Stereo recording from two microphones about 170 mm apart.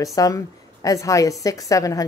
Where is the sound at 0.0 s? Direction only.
20° left (ahead or behind).